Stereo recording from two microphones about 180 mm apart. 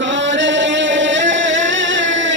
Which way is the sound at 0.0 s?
90° right.